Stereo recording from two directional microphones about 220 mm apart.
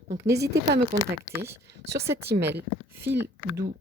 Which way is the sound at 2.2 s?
50° right (ahead or behind).